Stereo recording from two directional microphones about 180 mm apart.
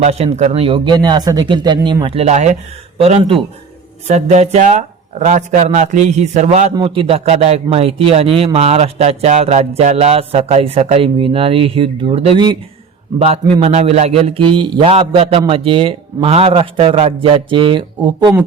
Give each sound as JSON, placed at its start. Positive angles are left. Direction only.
{"t": 0.0, "sound": "a man's voice", "side_deg": -35}
{"t": 6.7, "sound": "a man's voice", "side_deg": -30}